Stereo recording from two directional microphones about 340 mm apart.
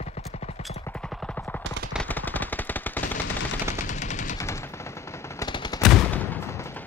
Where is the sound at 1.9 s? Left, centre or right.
Centre.